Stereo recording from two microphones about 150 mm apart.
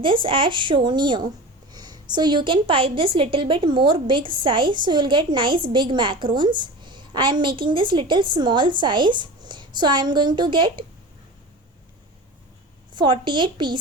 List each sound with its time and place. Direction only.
0.0 s a woman's voice: 35° right (ahead or behind)
12.9 s a woman's voice: 30° right (ahead or behind)